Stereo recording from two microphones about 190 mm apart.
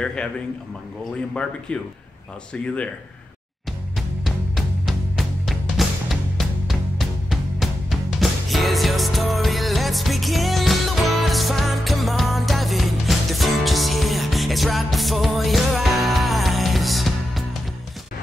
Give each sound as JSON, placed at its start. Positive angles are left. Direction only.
{"t": 0.0, "sound": "speech", "side_deg": 5}
{"t": 1.3, "sound": "speech", "side_deg": 5}
{"t": 3.9, "sound": "music", "side_deg": 0}